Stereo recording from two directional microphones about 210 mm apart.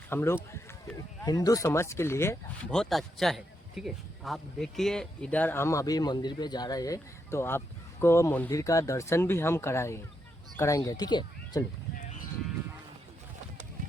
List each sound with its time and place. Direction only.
0.1 s speech: 10° left (ahead or behind)